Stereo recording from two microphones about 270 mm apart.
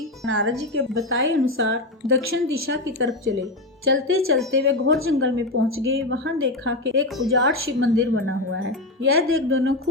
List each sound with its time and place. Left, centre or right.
0.3 s a woman's voice: right